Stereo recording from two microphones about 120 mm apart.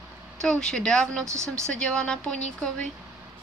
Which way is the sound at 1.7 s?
5° left (ahead or behind).